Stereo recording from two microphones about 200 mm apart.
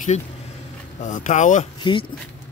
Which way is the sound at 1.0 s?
40° left (ahead or behind).